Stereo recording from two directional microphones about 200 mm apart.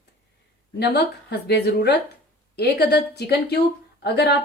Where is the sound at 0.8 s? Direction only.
55° left (ahead or behind).